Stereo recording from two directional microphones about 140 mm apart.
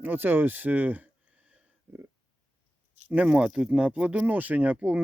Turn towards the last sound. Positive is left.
turn(degrees=-10)  # may be behind; listen again after turning